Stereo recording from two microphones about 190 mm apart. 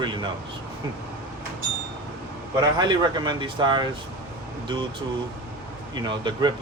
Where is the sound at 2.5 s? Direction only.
25° right (ahead or behind).